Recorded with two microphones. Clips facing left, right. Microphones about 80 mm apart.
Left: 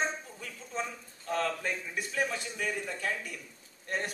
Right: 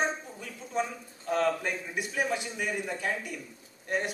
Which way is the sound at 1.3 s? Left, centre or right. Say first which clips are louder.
Right 4 dB; centre.